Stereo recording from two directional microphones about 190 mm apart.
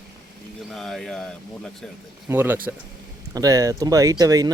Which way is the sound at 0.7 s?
Centre (ahead or behind).